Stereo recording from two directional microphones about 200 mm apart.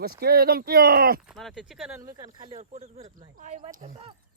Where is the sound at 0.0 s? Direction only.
50° right (ahead or behind).